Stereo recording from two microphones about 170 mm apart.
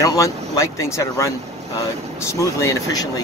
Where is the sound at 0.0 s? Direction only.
20° left (ahead or behind).